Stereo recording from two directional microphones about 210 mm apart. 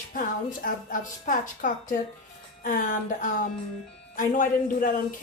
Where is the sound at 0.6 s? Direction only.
40° left (ahead or behind).